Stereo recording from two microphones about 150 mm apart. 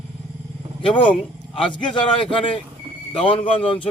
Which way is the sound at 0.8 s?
35° left (ahead or behind).